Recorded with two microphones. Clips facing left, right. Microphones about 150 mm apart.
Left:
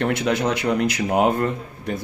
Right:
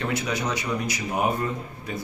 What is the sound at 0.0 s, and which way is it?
Speech, 65° left (ahead or behind).